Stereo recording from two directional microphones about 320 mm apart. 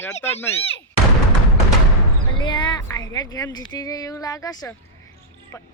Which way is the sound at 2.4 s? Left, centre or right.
Centre.